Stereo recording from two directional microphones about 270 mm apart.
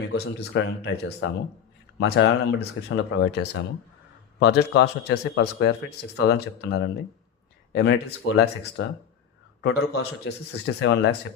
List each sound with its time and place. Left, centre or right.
0.0 s a man's voice: left